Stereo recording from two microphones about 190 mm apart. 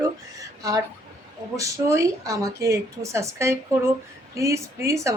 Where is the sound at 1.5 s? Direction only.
15° right (ahead or behind).